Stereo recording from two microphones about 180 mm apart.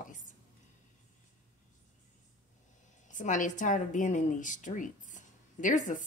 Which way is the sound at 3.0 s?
45° left (ahead or behind).